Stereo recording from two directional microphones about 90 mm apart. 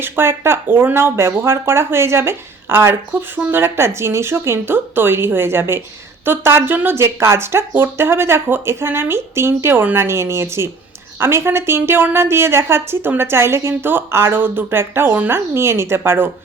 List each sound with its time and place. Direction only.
0.0 s speech: 25° right (ahead or behind)